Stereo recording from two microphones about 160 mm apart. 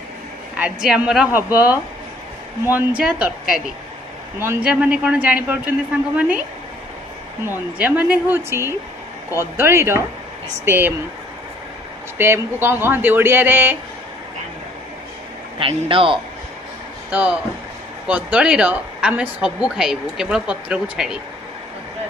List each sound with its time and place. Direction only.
0.6 s a woman's voice: 5° right (ahead or behind)
3.0 s a woman's voice: 5° right (ahead or behind)
7.4 s a woman's voice: 10° right (ahead or behind)
12.2 s a woman's voice: 15° right (ahead or behind)
15.6 s a man's voice: 35° right (ahead or behind)
17.1 s a woman's voice: 5° right (ahead or behind)